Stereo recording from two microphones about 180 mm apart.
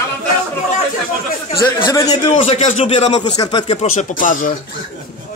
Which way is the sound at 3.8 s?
45° left (ahead or behind).